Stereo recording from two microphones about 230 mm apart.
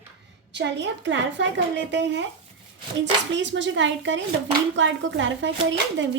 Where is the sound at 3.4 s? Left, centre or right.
Right.